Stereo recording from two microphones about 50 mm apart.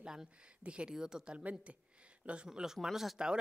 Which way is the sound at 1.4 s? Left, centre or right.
Right.